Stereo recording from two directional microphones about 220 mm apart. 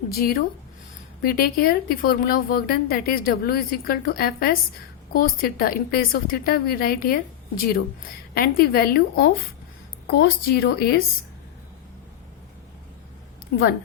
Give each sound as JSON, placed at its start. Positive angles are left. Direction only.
{"t": 0.1, "sound": "a woman's voice", "side_deg": 45}
{"t": 8.4, "sound": "a woman's voice", "side_deg": 45}
{"t": 13.5, "sound": "a woman's voice", "side_deg": 45}